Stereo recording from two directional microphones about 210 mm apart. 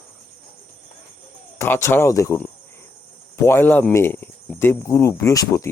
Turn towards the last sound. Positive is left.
turn(degrees=15)  # may be behind; listen again after turning